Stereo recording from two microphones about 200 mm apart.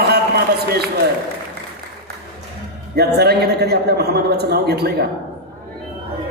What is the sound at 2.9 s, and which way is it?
A man's voice, 55° right (ahead or behind).